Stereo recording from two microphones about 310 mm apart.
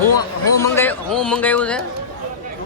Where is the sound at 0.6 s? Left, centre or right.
Centre.